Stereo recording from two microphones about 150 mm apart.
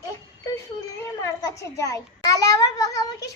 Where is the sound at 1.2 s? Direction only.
20° left (ahead or behind).